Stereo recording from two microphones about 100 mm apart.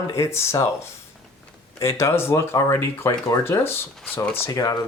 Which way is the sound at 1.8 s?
25° left (ahead or behind).